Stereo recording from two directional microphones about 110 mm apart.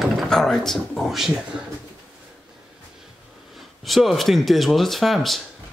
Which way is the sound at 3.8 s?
Centre (ahead or behind).